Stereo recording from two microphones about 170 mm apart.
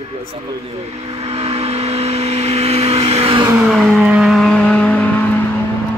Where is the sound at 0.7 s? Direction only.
35° right (ahead or behind).